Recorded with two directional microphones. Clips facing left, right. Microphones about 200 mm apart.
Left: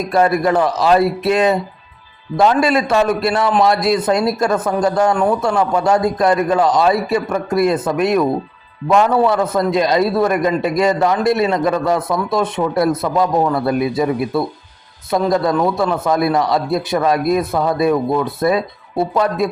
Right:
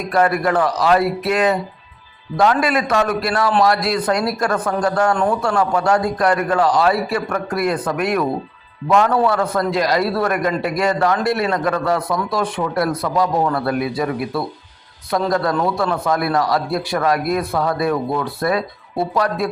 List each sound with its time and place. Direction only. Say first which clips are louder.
0.1 s a man's voice: left 2 dB; 25° left (ahead or behind)
5.1 s a man's voice: left 2 dB; 10° left (ahead or behind)
5.5 s a man's voice: left 2 dB; 20° left (ahead or behind)